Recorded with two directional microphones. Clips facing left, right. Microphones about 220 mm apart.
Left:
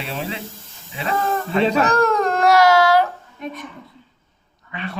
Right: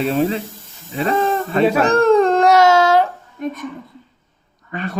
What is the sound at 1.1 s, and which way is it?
Speech, 20° right (ahead or behind).